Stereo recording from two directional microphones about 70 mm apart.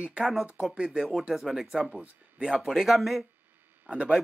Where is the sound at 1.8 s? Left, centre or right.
Centre.